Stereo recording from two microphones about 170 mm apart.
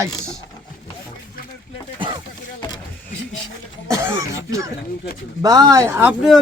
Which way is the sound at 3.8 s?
15° right (ahead or behind).